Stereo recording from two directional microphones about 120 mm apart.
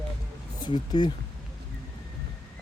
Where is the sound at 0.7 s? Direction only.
35° left (ahead or behind).